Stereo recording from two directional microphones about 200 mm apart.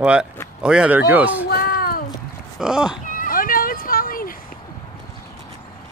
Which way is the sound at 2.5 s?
5° right (ahead or behind).